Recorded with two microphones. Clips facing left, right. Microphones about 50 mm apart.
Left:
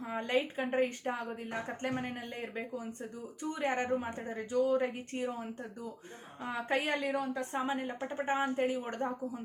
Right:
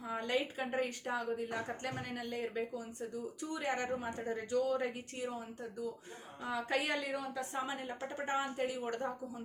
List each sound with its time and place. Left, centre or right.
0.0 s a woman's voice: left
5.1 s a woman's voice: left